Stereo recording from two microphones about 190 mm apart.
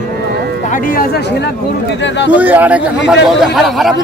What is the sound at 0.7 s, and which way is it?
Speech, 50° left (ahead or behind).